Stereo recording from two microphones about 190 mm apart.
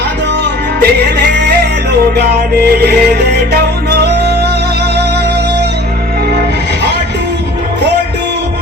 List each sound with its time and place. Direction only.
2.6 s music: 55° right (ahead or behind)